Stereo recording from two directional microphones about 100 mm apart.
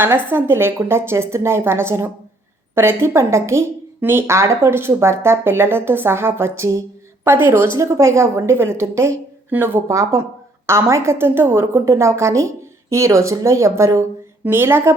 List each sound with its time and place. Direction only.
0.3 s speech: 20° right (ahead or behind)